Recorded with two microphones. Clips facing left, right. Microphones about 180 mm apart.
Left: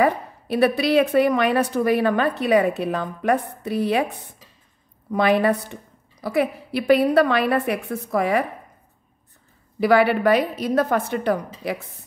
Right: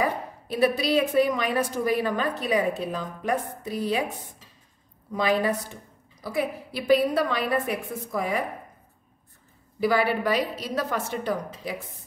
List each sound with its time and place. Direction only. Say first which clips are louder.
0.0 s a woman's voice: left 7 dB; 65° left (ahead or behind)
5.1 s a woman's voice: left 5 dB; 65° left (ahead or behind)
9.8 s a woman's voice: left 6 dB; 65° left (ahead or behind)